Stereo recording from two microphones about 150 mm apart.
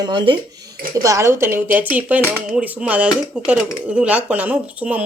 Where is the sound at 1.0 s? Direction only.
20° right (ahead or behind).